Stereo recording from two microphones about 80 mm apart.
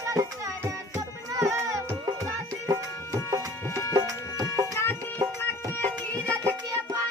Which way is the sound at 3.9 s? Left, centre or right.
Right.